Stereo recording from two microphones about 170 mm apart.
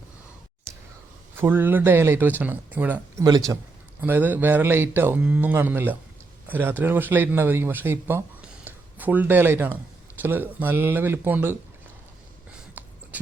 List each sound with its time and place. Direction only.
1.4 s speech: 10° right (ahead or behind)
3.2 s speech: 20° right (ahead or behind)
4.0 s speech: 10° right (ahead or behind)
12.8 s a sound: 10° right (ahead or behind)